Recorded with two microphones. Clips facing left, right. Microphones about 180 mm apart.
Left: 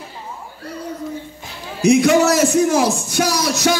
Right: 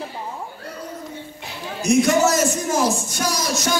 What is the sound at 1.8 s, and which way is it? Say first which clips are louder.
A man's voice: left 4 dB; 65° left (ahead or behind).